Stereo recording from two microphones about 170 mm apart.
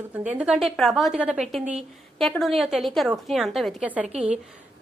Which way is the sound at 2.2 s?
Centre (ahead or behind).